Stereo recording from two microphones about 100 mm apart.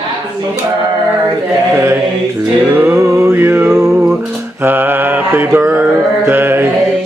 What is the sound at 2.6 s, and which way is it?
Music, 25° right (ahead or behind).